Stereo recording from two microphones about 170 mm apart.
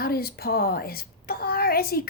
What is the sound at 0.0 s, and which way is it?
A woman's voice, 65° left (ahead or behind).